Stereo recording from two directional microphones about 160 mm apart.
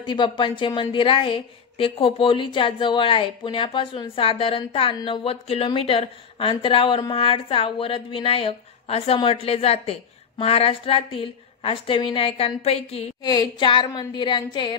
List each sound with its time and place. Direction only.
0.0 s a woman's voice: 30° left (ahead or behind)
13.2 s a woman's voice: 25° left (ahead or behind)